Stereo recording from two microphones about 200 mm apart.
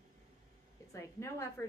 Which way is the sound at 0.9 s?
15° left (ahead or behind).